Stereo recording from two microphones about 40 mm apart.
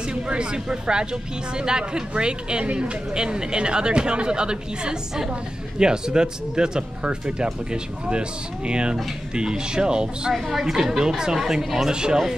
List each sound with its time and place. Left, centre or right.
0.1 s speech: right
10.3 s a woman's voice: centre